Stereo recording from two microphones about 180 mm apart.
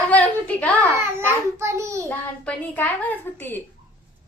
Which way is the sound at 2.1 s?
10° left (ahead or behind).